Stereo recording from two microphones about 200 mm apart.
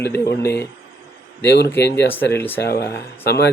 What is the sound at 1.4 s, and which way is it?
Speech, 55° left (ahead or behind).